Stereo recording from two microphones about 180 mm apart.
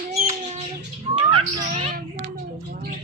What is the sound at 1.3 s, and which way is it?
Bird, 30° right (ahead or behind).